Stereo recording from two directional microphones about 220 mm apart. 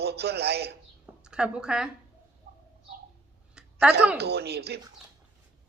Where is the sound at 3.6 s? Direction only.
5° right (ahead or behind).